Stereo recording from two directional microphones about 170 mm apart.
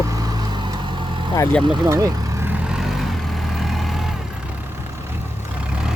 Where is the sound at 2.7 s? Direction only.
Centre (ahead or behind).